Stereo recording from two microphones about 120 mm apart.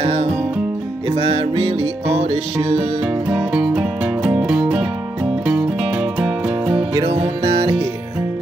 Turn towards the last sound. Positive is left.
turn(degrees=-45)  # may be behind; listen again after turning